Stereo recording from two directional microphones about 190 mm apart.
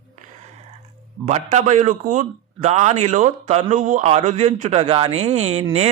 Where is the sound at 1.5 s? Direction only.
40° right (ahead or behind).